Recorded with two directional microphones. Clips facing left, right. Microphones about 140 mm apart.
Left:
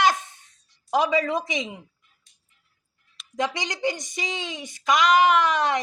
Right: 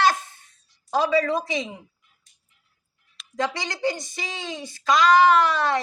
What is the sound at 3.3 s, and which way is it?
Speech, 20° left (ahead or behind).